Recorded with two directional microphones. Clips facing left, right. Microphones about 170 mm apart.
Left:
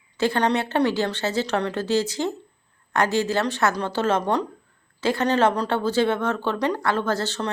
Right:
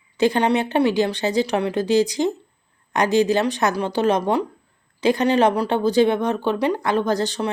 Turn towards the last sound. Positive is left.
turn(degrees=-15)  # may be behind; listen again after turning